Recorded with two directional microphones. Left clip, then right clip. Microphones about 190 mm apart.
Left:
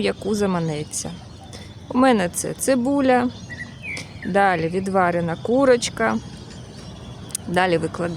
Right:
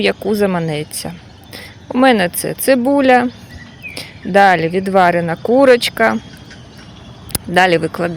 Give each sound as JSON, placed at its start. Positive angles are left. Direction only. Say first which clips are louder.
{"t": 0.0, "sound": "speech", "louder": "right 7 dB", "side_deg": -15}
{"t": 7.3, "sound": "speech", "louder": "right 8 dB", "side_deg": -20}